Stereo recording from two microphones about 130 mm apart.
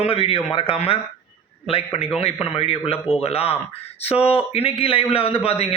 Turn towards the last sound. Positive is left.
turn(degrees=50)  # may be behind; listen again after turning